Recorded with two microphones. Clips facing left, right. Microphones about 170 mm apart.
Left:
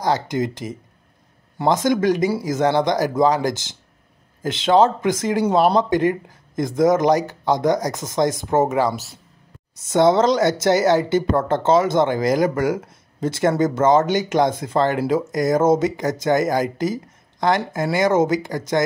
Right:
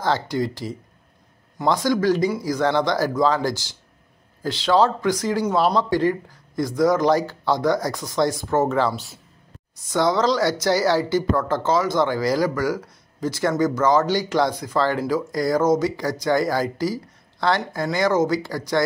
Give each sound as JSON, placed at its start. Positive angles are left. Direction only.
{"t": 0.0, "sound": "speech", "side_deg": 20}
{"t": 9.8, "sound": "speech", "side_deg": 25}